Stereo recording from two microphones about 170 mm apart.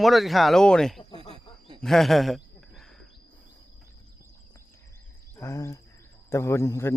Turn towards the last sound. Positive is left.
turn(degrees=15)  # may be behind; listen again after turning